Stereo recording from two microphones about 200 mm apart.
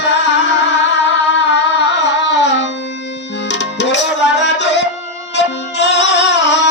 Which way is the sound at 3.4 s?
60° left (ahead or behind).